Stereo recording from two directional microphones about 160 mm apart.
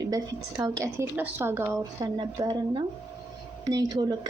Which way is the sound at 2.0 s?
25° right (ahead or behind).